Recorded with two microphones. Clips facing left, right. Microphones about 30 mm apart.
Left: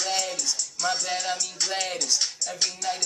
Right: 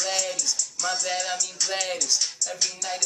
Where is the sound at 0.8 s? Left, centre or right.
Centre.